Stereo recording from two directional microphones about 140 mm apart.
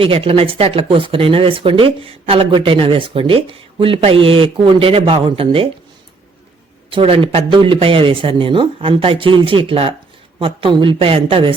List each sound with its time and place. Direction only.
0.0 s speech: 40° right (ahead or behind)
6.9 s speech: 40° right (ahead or behind)